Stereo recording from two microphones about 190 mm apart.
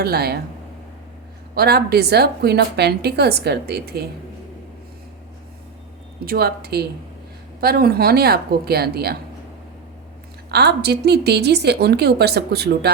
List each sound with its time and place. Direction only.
0.0 s a woman's voice: 55° right (ahead or behind)
1.5 s a woman's voice: 55° right (ahead or behind)
6.2 s a woman's voice: 55° right (ahead or behind)
10.5 s a woman's voice: 60° right (ahead or behind)